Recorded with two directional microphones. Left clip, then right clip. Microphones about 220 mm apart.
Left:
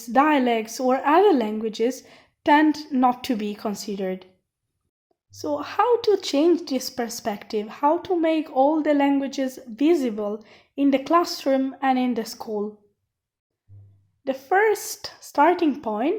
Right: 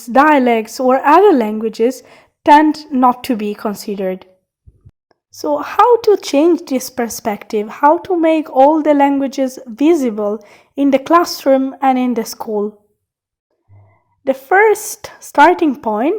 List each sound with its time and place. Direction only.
0.0 s speech: 30° right (ahead or behind)
5.3 s speech: 35° right (ahead or behind)
14.3 s speech: 30° right (ahead or behind)